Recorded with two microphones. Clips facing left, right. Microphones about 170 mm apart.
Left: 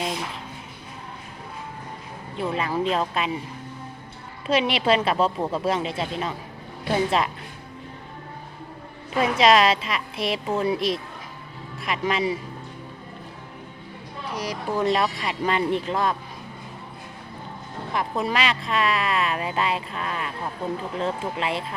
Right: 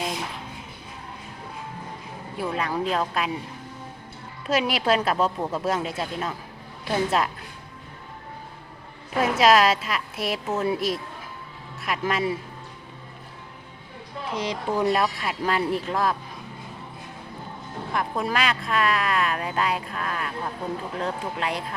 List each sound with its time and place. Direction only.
2.4 s speech: centre (ahead or behind)
4.4 s speech: centre (ahead or behind)
9.1 s speech: 5° right (ahead or behind)
14.3 s speech: 25° right (ahead or behind)
14.8 s speech: 5° right (ahead or behind)
17.9 s speech: centre (ahead or behind)